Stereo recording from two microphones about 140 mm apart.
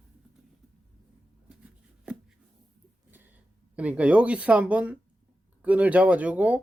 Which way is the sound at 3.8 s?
10° right (ahead or behind).